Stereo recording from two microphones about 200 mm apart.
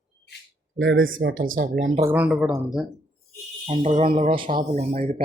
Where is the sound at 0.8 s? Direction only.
80° right; by 1.9 s 55° right (ahead or behind).